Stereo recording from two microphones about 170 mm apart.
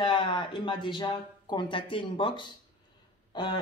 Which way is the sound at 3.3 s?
25° left (ahead or behind).